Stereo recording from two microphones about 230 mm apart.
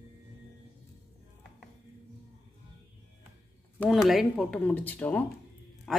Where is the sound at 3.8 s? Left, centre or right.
Centre.